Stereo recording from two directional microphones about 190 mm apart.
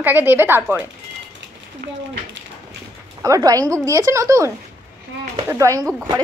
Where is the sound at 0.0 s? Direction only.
10° right (ahead or behind).